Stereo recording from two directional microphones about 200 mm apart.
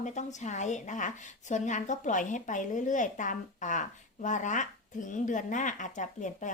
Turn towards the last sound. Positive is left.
turn(degrees=40)  # may be behind; listen again after turning